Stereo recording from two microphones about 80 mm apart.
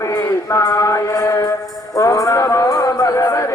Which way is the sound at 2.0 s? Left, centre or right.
Left.